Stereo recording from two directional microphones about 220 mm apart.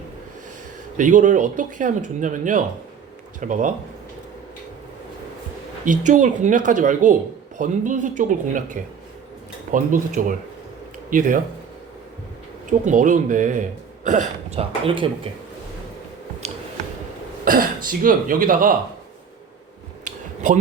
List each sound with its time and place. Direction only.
0.9 s speech: 35° right (ahead or behind)
5.8 s speech: 35° right (ahead or behind)
12.8 s speech: 35° right (ahead or behind)
17.4 s speech: 40° right (ahead or behind)
20.1 s a sound: 35° right (ahead or behind)